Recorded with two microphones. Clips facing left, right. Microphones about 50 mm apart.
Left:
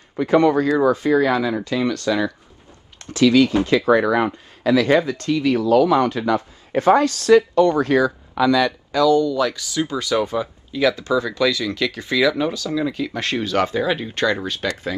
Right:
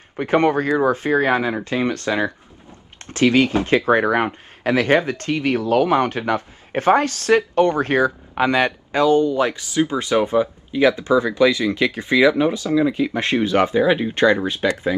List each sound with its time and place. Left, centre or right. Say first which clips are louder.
0.2 s speech: left 2 dB; right